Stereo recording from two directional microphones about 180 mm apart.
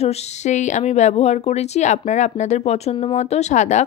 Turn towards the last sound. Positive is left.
turn(degrees=40)  # may be behind; listen again after turning